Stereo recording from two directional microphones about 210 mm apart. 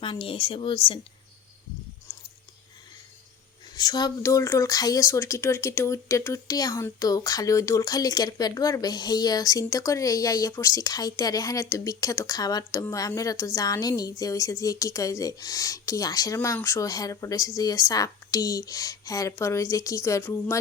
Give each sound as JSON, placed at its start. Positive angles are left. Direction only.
{"t": 0.0, "sound": "speech", "side_deg": 25}
{"t": 3.8, "sound": "speech", "side_deg": 20}